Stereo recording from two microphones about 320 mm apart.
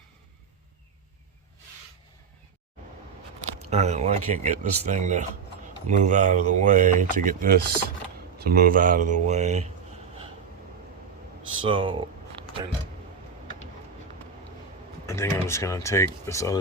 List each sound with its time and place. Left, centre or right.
3.7 s speech: right
11.6 s speech: centre
15.0 s speech: centre